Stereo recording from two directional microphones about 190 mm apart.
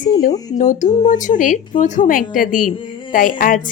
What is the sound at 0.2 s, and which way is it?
A woman's voice, 40° left (ahead or behind).